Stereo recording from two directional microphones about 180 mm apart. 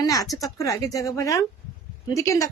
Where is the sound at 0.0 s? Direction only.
20° left (ahead or behind).